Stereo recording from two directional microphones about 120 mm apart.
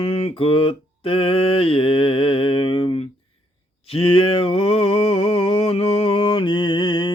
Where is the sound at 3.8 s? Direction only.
50° left (ahead or behind).